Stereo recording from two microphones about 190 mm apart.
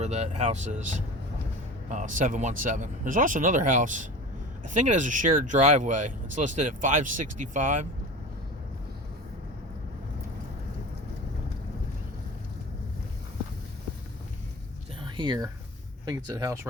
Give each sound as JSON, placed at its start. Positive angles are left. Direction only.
{"t": 0.0, "sound": "speech", "side_deg": -35}
{"t": 15.0, "sound": "a sound", "side_deg": -25}
{"t": 16.0, "sound": "speech", "side_deg": -20}